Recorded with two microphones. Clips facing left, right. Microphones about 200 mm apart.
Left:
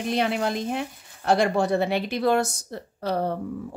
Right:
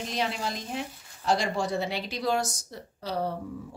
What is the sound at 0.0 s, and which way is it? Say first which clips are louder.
Speech: left 7 dB; 60° left (ahead or behind).